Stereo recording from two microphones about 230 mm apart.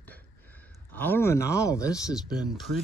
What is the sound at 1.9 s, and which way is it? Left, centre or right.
Speech, centre.